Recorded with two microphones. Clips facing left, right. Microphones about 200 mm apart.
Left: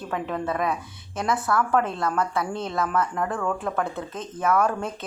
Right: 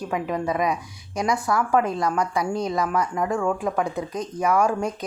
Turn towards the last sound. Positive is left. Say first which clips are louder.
# right 2 dB
turn(degrees=-10)  # may be behind; listen again after turning